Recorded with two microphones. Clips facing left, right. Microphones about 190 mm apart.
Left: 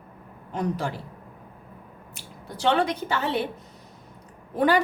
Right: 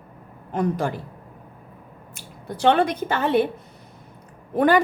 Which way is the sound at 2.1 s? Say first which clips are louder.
Right 6 dB; 55° right (ahead or behind).